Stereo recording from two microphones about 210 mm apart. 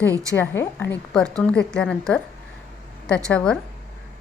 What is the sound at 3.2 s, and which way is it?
Speech, 5° left (ahead or behind).